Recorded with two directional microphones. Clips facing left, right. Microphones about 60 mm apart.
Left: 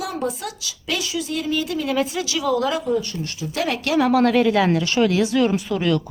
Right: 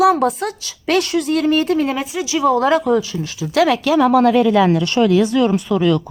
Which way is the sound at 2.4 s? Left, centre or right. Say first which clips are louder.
Right 6 dB; right.